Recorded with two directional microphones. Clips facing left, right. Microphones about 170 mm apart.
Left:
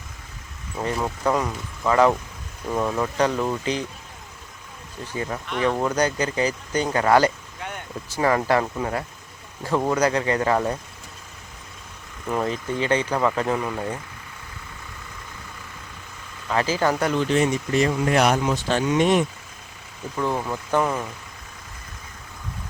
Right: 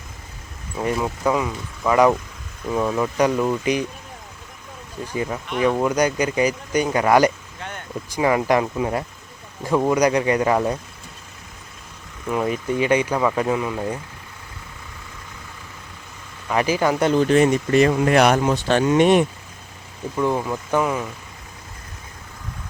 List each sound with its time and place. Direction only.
0.9 s speech: centre (ahead or behind)
1.9 s speech: 10° right (ahead or behind)
5.0 s speech: 20° right (ahead or behind)
12.5 s speech: 15° right (ahead or behind)
16.5 s speech: 15° right (ahead or behind)
17.2 s speech: 55° right (ahead or behind)
20.1 s speech: 5° right (ahead or behind)